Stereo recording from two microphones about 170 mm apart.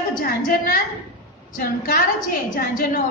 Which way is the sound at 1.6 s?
55° left (ahead or behind).